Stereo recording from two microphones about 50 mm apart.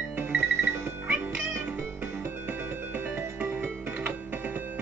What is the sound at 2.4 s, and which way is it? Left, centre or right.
Music, right.